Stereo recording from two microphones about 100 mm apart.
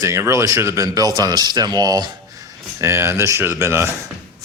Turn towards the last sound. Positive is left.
turn(degrees=-25)  # may be behind; listen again after turning